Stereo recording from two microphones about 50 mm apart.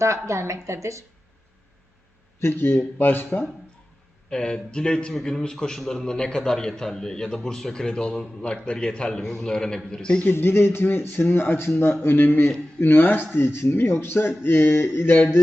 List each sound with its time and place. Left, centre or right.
0.0 s speech: right
2.4 s speech: left
4.3 s a man's voice: centre
10.2 s speech: left